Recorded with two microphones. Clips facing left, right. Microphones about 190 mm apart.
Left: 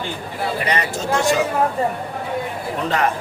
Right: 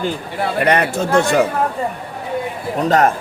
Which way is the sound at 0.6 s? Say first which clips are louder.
Right 10 dB; 60° right (ahead or behind).